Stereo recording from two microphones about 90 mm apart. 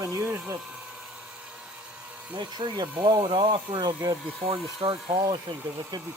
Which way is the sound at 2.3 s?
55° right (ahead or behind).